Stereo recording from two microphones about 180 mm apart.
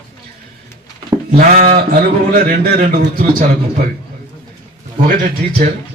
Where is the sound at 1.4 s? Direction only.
55° right (ahead or behind).